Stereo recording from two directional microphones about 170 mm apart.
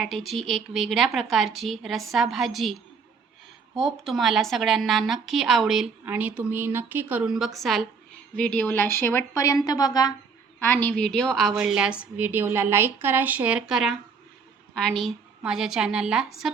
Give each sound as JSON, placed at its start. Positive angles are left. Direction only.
{"t": 0.0, "sound": "a woman's voice", "side_deg": 0}
{"t": 3.8, "sound": "a woman's voice", "side_deg": 0}
{"t": 10.6, "sound": "a woman's voice", "side_deg": 10}